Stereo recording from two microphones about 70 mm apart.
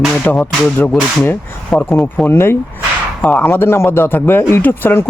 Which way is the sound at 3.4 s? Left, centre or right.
Left.